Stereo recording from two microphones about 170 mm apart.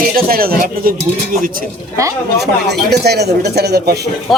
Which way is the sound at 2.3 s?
75° right (ahead or behind).